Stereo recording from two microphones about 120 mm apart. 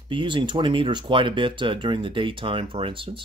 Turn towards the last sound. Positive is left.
turn(degrees=-45)  # may be behind; listen again after turning